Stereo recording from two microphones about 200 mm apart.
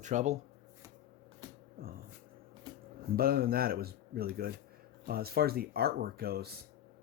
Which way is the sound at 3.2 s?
50° right (ahead or behind).